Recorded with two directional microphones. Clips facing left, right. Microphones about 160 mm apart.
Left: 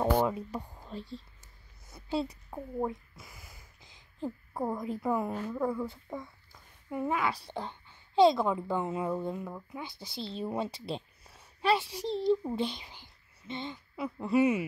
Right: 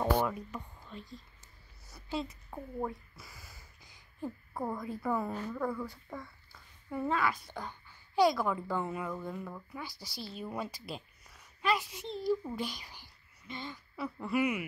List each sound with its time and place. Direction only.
0.0 s speech: 25° left (ahead or behind)
7.3 s a woman's voice: 25° left (ahead or behind)